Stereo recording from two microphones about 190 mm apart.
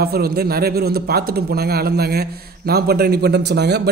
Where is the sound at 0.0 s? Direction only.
55° right (ahead or behind).